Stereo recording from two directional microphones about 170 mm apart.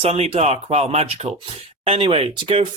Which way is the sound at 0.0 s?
40° right (ahead or behind).